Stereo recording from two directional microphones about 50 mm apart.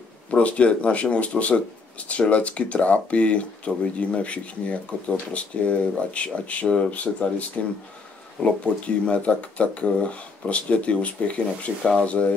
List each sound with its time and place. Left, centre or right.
0.3 s speech: left